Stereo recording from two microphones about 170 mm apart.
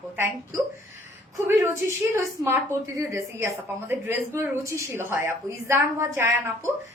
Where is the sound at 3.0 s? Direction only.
15° right (ahead or behind).